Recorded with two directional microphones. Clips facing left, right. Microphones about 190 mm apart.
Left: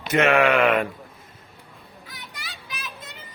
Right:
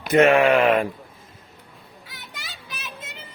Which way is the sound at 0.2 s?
35° right (ahead or behind).